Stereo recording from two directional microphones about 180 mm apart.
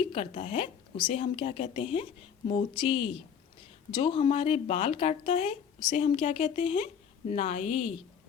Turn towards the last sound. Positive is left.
turn(degrees=35)  # may be behind; listen again after turning